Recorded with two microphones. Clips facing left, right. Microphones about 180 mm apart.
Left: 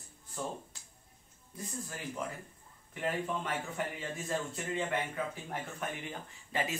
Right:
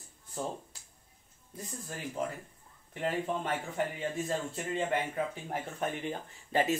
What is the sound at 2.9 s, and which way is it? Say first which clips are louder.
Speech: right 2 dB; 35° right (ahead or behind).